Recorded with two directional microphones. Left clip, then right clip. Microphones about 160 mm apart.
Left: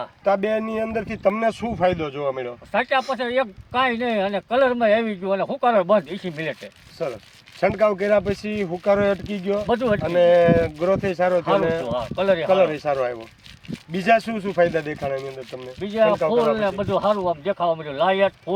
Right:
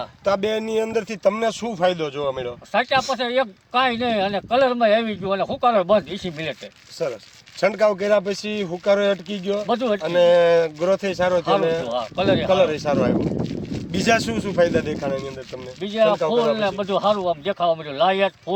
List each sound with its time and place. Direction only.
0.3 s a man's voice: 35° right (ahead or behind)
2.7 s speech: centre (ahead or behind)
7.0 s a man's voice: 35° right (ahead or behind)
9.6 s speech: 5° left (ahead or behind)
10.0 s a man's voice: 25° right (ahead or behind)
11.8 s speech: 5° left (ahead or behind)
12.5 s speech: 35° right (ahead or behind)
16.0 s speech: 5° left (ahead or behind)